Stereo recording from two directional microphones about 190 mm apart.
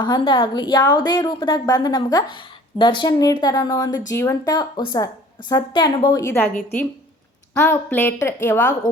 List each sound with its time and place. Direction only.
0.0 s a woman's voice: 25° left (ahead or behind)